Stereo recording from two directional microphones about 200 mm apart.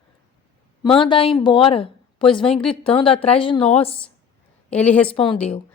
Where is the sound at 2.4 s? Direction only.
5° left (ahead or behind).